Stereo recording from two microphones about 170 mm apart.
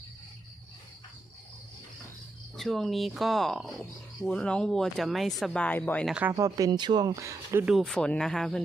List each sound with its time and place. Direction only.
2.6 s speech: centre (ahead or behind)
6.3 s speech: 20° right (ahead or behind)
7.6 s speech: centre (ahead or behind)